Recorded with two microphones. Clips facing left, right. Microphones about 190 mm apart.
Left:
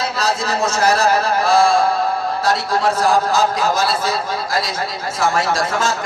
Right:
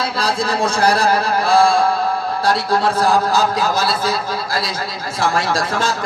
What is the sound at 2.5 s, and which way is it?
Music, 30° right (ahead or behind).